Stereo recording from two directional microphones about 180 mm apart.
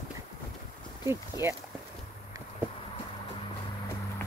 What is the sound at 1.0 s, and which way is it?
Speech, 15° right (ahead or behind).